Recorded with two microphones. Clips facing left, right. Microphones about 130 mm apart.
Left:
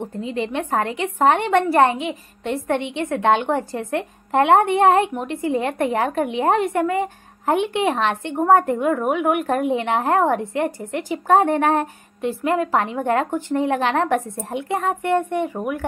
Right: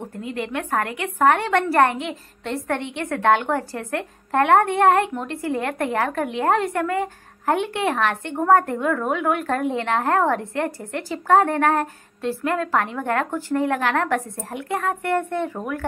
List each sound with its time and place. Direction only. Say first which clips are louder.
0.0 s a woman's voice: left 4 dB; 20° left (ahead or behind)